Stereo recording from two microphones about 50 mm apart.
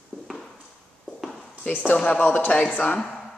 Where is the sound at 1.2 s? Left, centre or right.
Centre.